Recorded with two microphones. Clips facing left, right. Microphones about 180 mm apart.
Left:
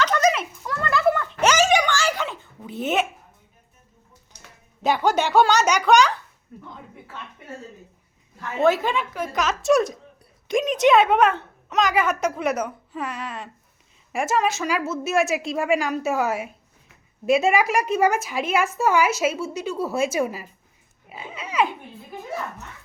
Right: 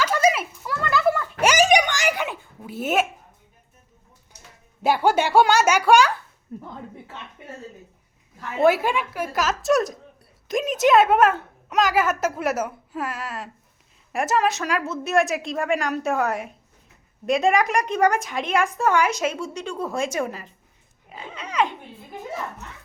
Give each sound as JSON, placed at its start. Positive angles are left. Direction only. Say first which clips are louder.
{"t": 0.0, "sound": "a sound", "louder": "even", "side_deg": -10}
{"t": 4.8, "sound": "a woman's voice", "louder": "right 1 dB", "side_deg": -10}
{"t": 6.5, "sound": "speech", "louder": "right 6 dB", "side_deg": -40}
{"t": 8.5, "sound": "a woman's voice", "louder": "right 1 dB", "side_deg": -10}
{"t": 21.1, "sound": "pig", "louder": "left 1 dB", "side_deg": 10}